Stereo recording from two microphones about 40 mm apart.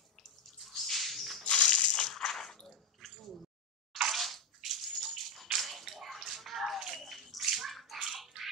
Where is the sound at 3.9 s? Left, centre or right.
Centre.